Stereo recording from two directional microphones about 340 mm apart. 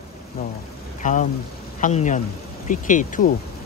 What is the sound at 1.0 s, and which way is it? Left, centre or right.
Speech, left.